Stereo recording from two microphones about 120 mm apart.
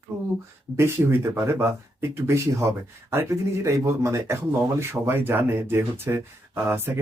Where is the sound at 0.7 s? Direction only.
20° right (ahead or behind).